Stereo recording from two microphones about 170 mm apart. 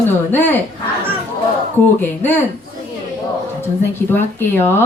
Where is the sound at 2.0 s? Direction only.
10° left (ahead or behind).